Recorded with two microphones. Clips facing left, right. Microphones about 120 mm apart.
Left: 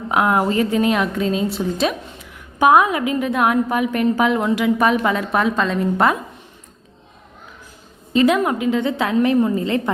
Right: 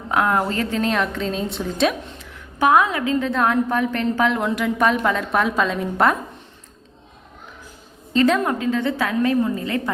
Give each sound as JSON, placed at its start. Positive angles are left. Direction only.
{"t": 0.1, "sound": "a woman's voice", "side_deg": 15}
{"t": 2.6, "sound": "a woman's voice", "side_deg": 15}
{"t": 8.1, "sound": "a woman's voice", "side_deg": 10}